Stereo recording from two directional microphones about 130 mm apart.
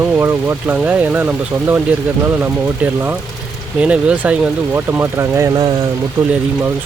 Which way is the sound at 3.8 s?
10° right (ahead or behind).